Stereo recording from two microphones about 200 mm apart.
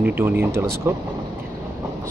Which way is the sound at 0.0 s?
10° right (ahead or behind).